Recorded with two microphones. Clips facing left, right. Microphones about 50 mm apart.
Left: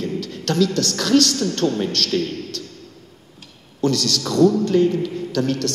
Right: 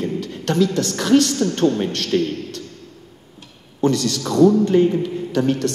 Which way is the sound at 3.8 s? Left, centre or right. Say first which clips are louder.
Right 2 dB; centre.